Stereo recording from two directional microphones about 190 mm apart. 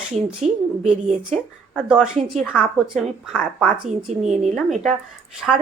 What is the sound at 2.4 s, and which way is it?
Speech, 10° left (ahead or behind).